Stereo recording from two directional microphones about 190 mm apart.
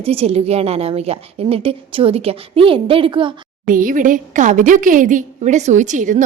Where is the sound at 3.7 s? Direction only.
45° right (ahead or behind).